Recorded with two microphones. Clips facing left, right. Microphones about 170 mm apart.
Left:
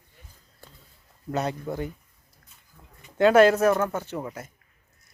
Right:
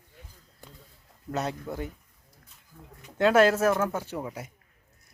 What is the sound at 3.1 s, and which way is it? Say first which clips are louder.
Speech: left 4 dB; centre (ahead or behind).